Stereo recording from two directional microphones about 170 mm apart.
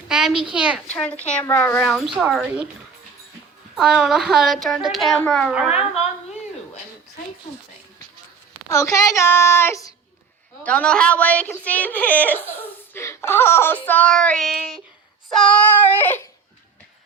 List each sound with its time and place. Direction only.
0.1 s a sound: 5° right (ahead or behind)
0.5 s a woman's voice: 5° right (ahead or behind)
0.9 s speech: 10° left (ahead or behind)
2.0 s a woman's voice: centre (ahead or behind)
3.8 s a woman's voice: centre (ahead or behind)
8.7 s speech: 20° left (ahead or behind)